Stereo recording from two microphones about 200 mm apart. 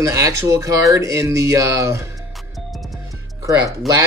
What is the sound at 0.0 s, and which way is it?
Speech, 15° right (ahead or behind).